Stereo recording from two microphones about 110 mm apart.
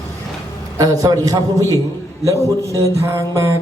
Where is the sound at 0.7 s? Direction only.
30° right (ahead or behind).